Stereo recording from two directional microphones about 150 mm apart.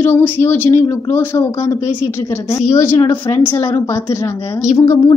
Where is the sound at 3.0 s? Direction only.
30° left (ahead or behind).